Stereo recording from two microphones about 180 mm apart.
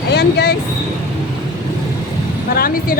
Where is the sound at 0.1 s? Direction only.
65° left (ahead or behind).